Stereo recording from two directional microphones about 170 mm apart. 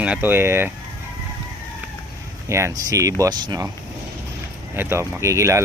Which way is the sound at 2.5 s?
15° right (ahead or behind).